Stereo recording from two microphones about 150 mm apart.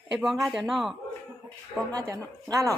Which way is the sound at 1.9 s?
20° right (ahead or behind).